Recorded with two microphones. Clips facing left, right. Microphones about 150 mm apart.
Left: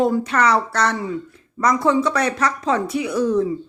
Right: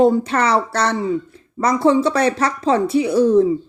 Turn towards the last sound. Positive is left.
turn(degrees=-30)  # may be behind; listen again after turning